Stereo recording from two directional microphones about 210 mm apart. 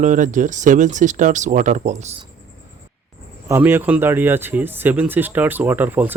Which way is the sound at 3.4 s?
10° right (ahead or behind).